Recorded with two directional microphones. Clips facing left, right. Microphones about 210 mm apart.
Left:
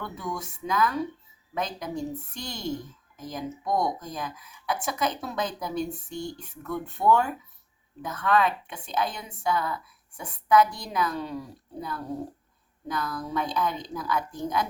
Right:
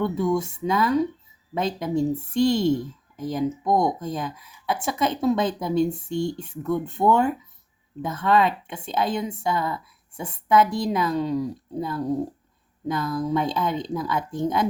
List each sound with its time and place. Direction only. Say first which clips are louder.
0.0 s speech: right 12 dB; 25° right (ahead or behind)